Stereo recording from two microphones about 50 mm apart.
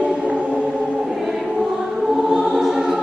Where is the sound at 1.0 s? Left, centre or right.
Centre.